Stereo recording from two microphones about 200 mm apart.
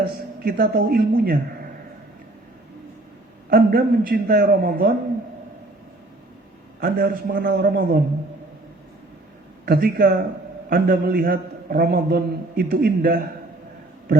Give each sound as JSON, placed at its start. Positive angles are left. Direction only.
{"t": 0.0, "sound": "a woman's voice", "side_deg": -45}
{"t": 3.5, "sound": "a man's voice", "side_deg": -50}
{"t": 6.7, "sound": "a man's voice", "side_deg": -50}
{"t": 9.6, "sound": "a man's voice", "side_deg": -50}